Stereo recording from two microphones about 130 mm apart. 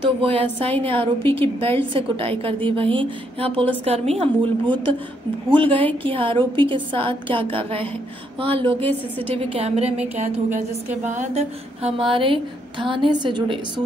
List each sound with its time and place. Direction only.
0.2 s a woman's voice: 45° right (ahead or behind)